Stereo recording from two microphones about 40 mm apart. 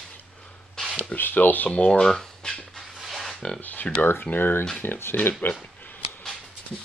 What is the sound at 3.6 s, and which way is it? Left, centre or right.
Speech, left.